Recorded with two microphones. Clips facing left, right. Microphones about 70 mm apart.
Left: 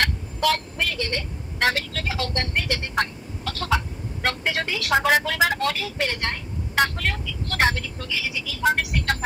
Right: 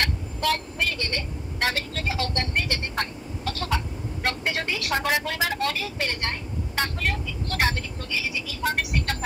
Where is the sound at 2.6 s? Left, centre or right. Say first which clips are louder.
Left 3 dB; left.